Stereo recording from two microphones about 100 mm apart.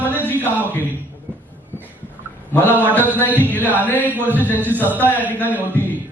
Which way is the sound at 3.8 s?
15° left (ahead or behind).